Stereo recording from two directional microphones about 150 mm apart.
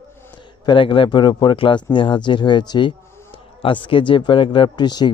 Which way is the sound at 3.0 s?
15° left (ahead or behind).